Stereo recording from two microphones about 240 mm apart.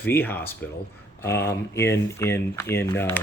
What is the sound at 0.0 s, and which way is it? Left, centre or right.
Speech, centre.